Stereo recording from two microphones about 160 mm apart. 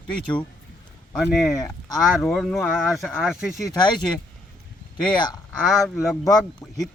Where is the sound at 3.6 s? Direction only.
20° left (ahead or behind).